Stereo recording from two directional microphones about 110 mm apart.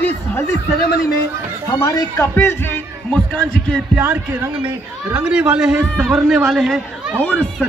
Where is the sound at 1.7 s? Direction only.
20° left (ahead or behind).